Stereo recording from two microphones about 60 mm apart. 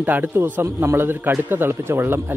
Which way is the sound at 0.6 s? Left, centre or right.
Right.